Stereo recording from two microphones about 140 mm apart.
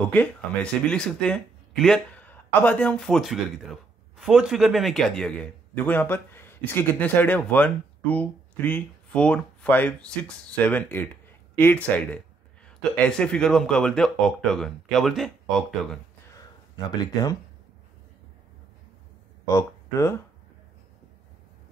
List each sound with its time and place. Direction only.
0.1 s a man's voice: 10° left (ahead or behind)
16.3 s a sound: 30° left (ahead or behind)
19.4 s speech: 20° left (ahead or behind)